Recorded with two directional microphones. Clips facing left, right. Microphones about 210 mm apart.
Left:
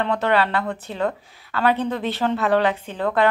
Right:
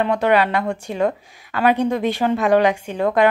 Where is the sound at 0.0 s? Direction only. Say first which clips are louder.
Right 3 dB; 10° right (ahead or behind).